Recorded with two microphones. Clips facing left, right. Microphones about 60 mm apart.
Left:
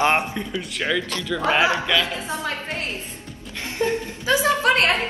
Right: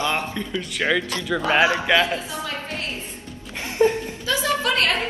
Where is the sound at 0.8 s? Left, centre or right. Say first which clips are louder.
Right 2 dB; centre.